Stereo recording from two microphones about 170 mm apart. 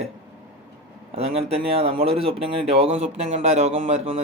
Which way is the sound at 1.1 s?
35° right (ahead or behind).